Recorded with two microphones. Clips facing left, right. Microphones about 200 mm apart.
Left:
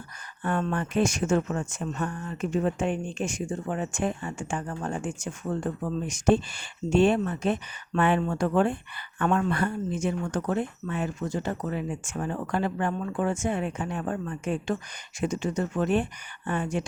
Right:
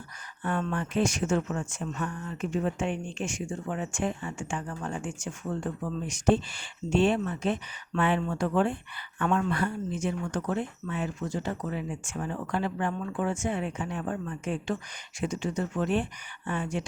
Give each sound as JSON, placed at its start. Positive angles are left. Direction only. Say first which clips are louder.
{"t": 0.4, "sound": "speech", "louder": "left 2 dB", "side_deg": 50}